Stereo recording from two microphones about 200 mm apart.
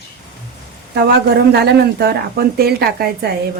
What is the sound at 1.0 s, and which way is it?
Speech, 55° right (ahead or behind).